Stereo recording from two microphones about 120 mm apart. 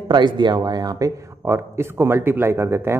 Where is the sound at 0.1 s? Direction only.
40° right (ahead or behind).